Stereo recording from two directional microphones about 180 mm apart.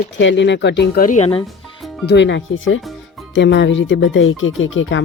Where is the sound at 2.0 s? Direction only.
75° left (ahead or behind).